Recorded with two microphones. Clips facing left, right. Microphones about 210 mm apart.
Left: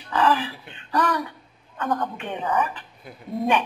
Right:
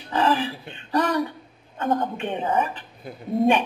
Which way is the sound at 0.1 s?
25° right (ahead or behind).